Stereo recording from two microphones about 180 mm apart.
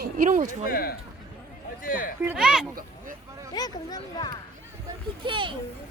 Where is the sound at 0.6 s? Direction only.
55° left (ahead or behind).